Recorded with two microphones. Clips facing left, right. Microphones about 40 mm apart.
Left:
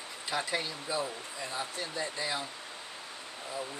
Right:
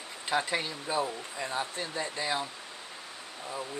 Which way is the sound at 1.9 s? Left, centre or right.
Right.